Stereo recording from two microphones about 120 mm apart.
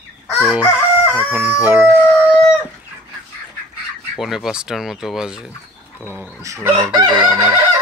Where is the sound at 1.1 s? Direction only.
15° right (ahead or behind).